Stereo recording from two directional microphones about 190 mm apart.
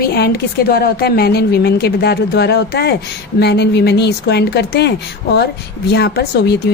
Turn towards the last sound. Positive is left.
turn(degrees=55)  # may be behind; listen again after turning